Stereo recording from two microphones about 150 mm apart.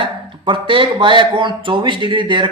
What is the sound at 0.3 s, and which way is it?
Speech, 35° right (ahead or behind).